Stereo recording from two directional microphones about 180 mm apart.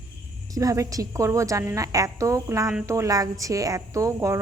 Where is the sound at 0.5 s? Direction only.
20° right (ahead or behind).